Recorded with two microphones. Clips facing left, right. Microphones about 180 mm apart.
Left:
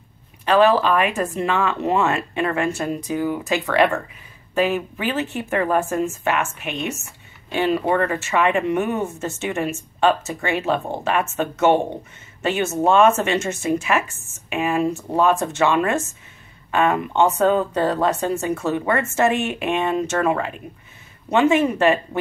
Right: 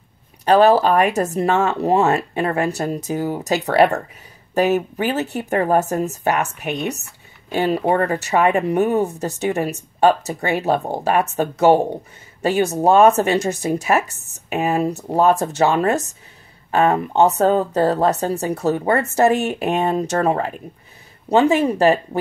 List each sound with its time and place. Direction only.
0.5 s speech: 40° right (ahead or behind)